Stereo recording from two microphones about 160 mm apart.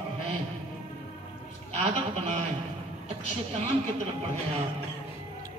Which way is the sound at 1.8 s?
45° right (ahead or behind).